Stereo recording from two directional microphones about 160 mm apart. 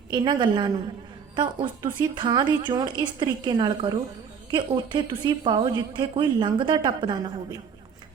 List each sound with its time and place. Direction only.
0.1 s a woman's voice: 30° right (ahead or behind)